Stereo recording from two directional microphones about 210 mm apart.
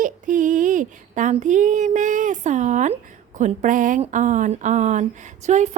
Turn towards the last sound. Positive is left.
turn(degrees=-35)  # may be behind; listen again after turning